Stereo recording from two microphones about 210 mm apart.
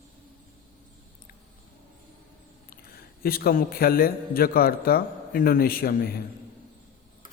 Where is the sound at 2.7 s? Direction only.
45° left (ahead or behind).